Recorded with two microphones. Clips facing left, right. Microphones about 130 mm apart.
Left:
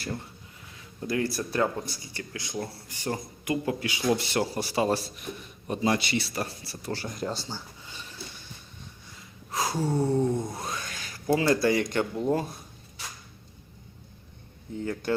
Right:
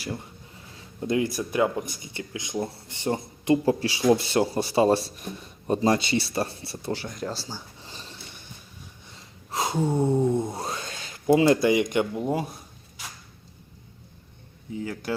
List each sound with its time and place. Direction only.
0.8 s speech: 20° right (ahead or behind)
6.9 s speech: centre (ahead or behind)
7.8 s a sound: 30° right (ahead or behind); by 12.5 s 10° right (ahead or behind)
14.7 s speech: 5° right (ahead or behind)